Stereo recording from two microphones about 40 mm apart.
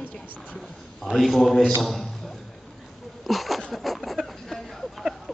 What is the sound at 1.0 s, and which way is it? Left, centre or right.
A man's voice, centre.